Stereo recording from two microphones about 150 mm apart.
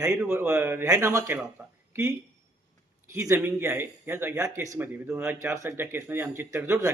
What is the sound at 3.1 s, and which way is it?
A man's voice, 20° right (ahead or behind).